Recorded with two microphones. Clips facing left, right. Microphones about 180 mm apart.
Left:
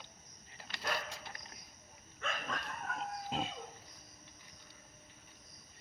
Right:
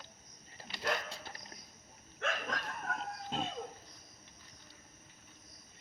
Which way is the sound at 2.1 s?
75° right (ahead or behind).